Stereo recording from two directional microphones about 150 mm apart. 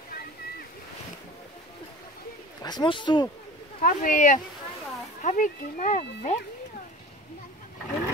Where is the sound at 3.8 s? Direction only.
60° left (ahead or behind).